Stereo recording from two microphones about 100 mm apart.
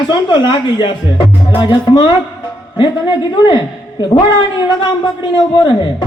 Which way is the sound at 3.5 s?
50° left (ahead or behind).